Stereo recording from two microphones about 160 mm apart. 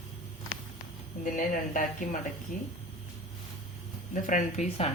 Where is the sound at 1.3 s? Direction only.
55° left (ahead or behind).